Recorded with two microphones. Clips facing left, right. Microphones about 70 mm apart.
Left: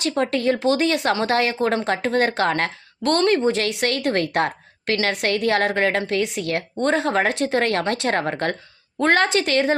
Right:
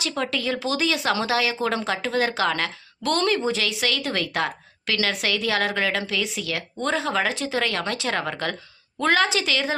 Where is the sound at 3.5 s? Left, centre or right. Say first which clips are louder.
Left 4 dB; left.